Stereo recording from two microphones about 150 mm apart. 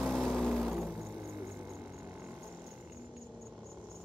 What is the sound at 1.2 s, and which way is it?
Mains hum, 15° right (ahead or behind).